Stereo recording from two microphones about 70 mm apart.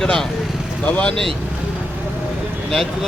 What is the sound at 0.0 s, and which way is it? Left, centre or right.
Speech, centre.